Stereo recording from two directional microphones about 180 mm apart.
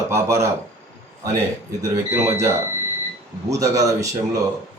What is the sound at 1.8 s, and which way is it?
A man's voice, 20° right (ahead or behind).